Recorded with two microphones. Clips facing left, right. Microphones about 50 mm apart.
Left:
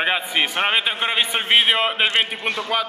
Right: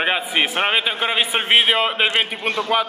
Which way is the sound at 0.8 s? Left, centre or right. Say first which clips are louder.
Right 1 dB; centre.